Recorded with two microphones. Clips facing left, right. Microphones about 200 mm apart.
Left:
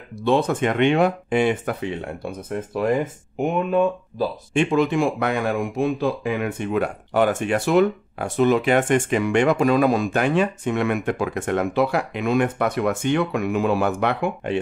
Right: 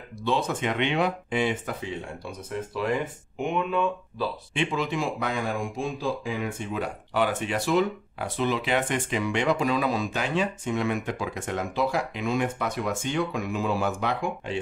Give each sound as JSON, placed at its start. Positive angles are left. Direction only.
{"t": 0.2, "sound": "speech", "side_deg": 55}